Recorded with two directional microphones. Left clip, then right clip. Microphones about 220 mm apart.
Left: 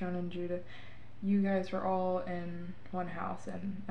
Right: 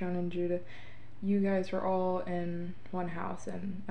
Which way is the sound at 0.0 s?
25° right (ahead or behind).